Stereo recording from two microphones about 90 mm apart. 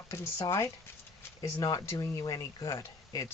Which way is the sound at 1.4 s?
40° left (ahead or behind).